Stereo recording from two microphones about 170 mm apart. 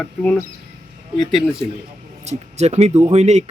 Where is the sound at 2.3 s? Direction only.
40° right (ahead or behind).